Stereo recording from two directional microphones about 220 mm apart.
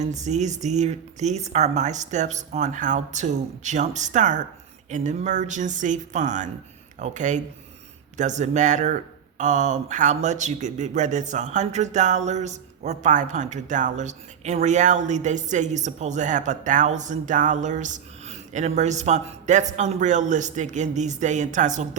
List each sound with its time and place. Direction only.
0.0 s speech: 30° right (ahead or behind)